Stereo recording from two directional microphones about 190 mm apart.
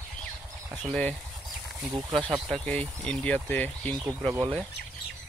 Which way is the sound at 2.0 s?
20° right (ahead or behind).